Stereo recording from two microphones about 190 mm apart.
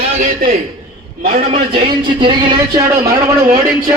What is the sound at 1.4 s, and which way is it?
A man's voice, 35° right (ahead or behind).